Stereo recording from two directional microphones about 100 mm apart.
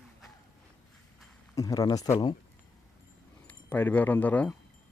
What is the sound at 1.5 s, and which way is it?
Speech, 35° left (ahead or behind).